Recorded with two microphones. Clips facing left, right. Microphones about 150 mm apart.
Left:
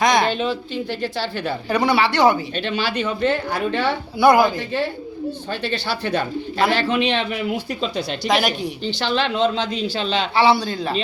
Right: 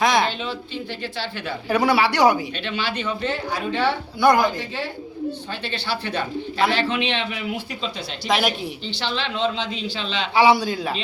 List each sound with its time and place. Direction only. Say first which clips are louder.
0.0 s a sound: left 2 dB; centre (ahead or behind)
0.3 s a sound: left 6 dB; 50° left (ahead or behind)
1.0 s speech: left 5 dB; 40° left (ahead or behind)
1.7 s speech: even; 10° right (ahead or behind)
2.6 s speech: left 5 dB; 40° left (ahead or behind); by 3.9 s 55° left (ahead or behind)
4.2 s speech: left 3 dB; 10° left (ahead or behind)
5.6 s speech: left 3 dB; 40° left (ahead or behind)
8.3 s speech: left 1 dB; centre (ahead or behind)
8.9 s speech: left 7 dB; 45° left (ahead or behind)
10.3 s speech: right 1 dB; 10° right (ahead or behind)